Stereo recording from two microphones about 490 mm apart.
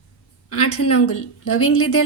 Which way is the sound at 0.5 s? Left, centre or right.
Left.